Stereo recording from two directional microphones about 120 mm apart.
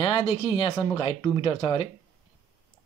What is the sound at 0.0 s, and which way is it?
Speech, 45° left (ahead or behind).